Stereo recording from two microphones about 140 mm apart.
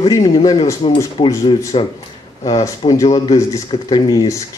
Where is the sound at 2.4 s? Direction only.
25° left (ahead or behind).